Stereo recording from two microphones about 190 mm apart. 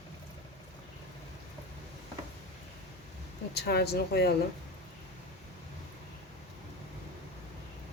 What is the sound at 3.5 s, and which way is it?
Speech, 60° left (ahead or behind).